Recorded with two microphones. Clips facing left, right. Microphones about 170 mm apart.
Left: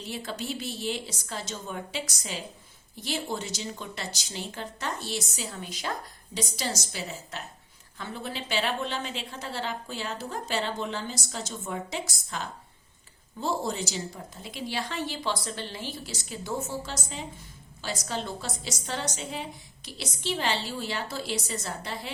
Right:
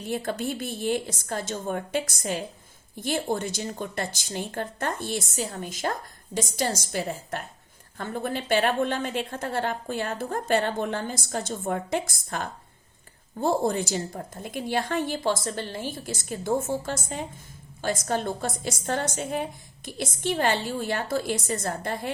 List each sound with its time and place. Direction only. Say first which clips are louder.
0.0 s speech: right 6 dB; 50° right (ahead or behind)